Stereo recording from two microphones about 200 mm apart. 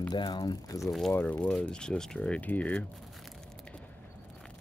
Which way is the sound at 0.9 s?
5° left (ahead or behind).